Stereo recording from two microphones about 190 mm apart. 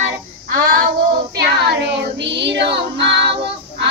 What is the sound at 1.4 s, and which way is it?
Music, 60° right (ahead or behind).